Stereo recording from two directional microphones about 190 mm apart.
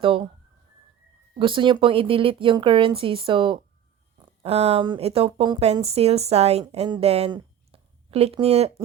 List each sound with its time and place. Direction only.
0.0 s speech: 30° right (ahead or behind)
1.4 s speech: 25° right (ahead or behind)